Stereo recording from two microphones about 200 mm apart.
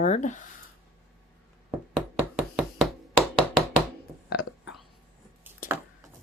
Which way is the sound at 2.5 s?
Centre (ahead or behind).